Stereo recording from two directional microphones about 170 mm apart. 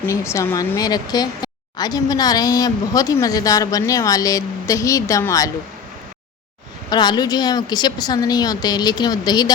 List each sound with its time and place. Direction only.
0.1 s speech: 15° left (ahead or behind)
6.9 s speech: 25° left (ahead or behind)